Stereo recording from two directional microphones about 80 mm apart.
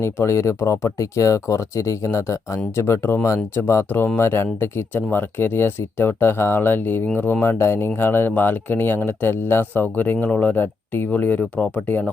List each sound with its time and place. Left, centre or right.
0.0 s speech: left